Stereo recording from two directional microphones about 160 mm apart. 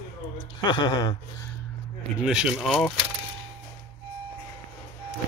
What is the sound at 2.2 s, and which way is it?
Speech, 5° right (ahead or behind).